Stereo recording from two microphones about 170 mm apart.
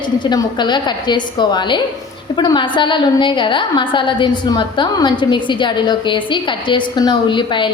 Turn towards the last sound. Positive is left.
turn(degrees=30)  # may be behind; listen again after turning